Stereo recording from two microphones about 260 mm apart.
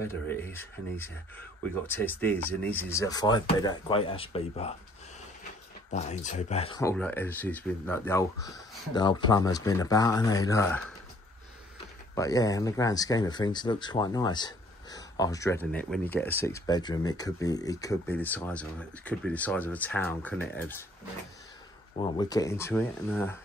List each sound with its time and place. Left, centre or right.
0.0 s speech: centre
5.9 s speech: left
6.8 s speech: centre
12.2 s speech: centre
21.9 s speech: centre